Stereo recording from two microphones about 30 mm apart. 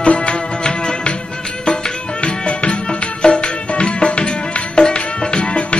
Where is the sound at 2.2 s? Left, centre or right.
Left.